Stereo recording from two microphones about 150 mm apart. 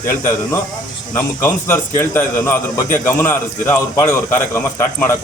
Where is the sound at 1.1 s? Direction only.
15° left (ahead or behind).